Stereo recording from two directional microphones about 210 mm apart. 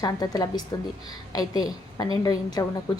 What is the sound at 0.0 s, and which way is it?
A woman's voice, 20° left (ahead or behind).